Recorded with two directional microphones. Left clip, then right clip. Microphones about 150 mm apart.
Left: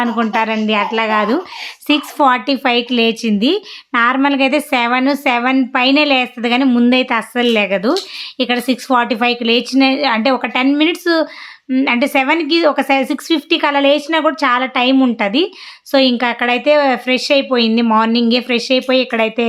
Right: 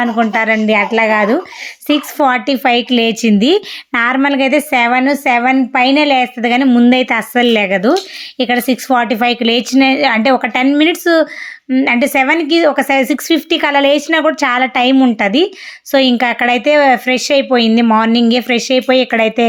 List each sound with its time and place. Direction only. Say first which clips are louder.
0.0 s a woman's voice: right 3 dB; 10° right (ahead or behind)
6.9 s a woman's voice: right 3 dB; 25° right (ahead or behind)